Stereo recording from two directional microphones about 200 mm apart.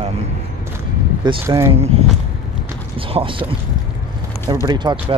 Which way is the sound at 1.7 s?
30° right (ahead or behind).